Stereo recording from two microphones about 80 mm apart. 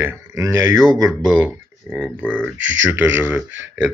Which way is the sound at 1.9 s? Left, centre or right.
Centre.